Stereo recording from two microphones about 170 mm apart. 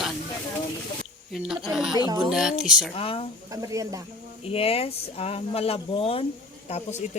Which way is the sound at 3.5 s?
20° right (ahead or behind).